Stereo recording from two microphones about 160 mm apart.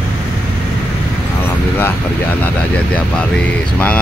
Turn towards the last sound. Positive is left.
turn(degrees=10)  # may be behind; listen again after turning